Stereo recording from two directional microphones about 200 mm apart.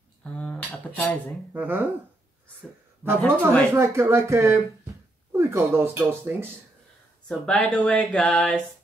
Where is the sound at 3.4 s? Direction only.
15° right (ahead or behind).